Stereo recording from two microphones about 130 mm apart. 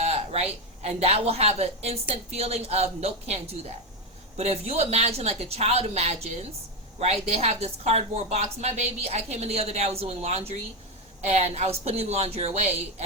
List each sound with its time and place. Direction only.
0.0 s a woman's voice: 55° right (ahead or behind)